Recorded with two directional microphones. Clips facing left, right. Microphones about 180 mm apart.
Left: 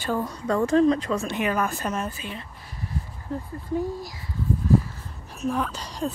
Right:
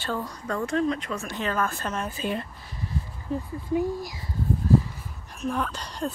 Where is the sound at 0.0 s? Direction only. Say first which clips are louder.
Left 4 dB; 15° left (ahead or behind).